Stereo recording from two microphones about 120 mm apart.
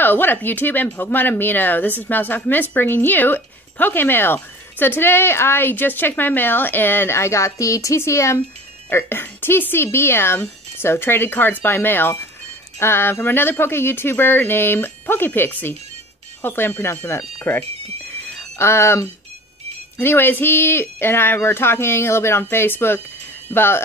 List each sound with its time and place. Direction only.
0.0 s speech: 15° left (ahead or behind)